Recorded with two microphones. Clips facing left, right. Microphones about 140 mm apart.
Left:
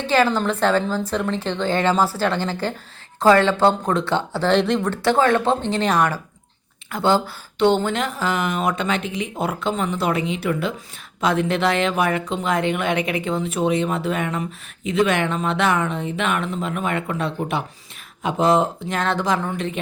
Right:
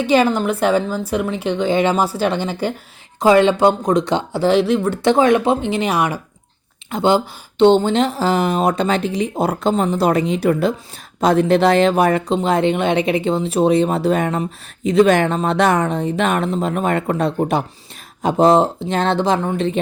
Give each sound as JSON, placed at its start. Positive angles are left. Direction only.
{"t": 0.0, "sound": "a woman's voice", "side_deg": -15}
{"t": 5.0, "sound": "a woman's voice", "side_deg": -15}